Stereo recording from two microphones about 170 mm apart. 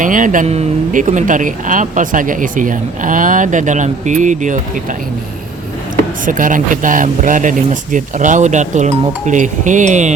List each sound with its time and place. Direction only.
0.0 s speech: 50° right (ahead or behind)
6.2 s speech: 50° right (ahead or behind)